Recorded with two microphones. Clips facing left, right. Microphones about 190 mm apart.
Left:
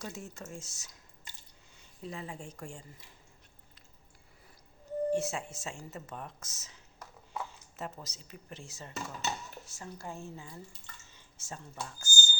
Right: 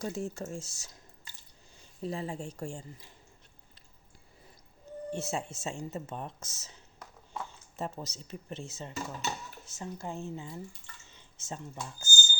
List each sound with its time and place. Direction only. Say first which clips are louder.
0.0 s speech: right 8 dB; 35° right (ahead or behind)
5.1 s speech: left 3 dB; 25° right (ahead or behind)
7.8 s speech: right 5 dB; 25° right (ahead or behind)